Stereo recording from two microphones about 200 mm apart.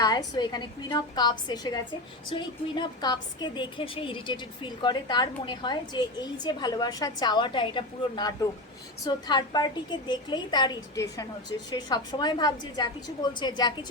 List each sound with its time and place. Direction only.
0.0 s a woman's voice: 20° left (ahead or behind)